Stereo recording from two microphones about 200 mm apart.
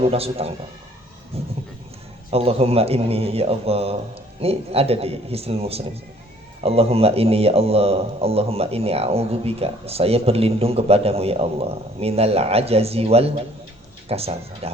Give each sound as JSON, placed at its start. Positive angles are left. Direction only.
{"t": 0.0, "sound": "a man's voice", "side_deg": -30}